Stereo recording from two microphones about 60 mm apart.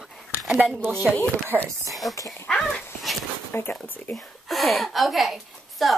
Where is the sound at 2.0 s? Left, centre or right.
Left.